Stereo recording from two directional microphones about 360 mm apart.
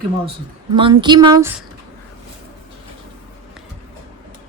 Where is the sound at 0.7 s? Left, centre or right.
Centre.